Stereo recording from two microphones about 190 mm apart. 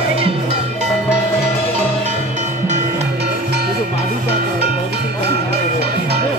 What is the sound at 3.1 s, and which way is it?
Music, 60° right (ahead or behind).